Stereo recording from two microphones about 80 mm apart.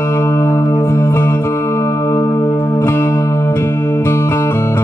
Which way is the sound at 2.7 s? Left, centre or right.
Left.